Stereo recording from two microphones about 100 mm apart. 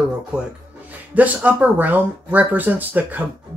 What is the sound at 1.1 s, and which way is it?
Speech, 15° right (ahead or behind).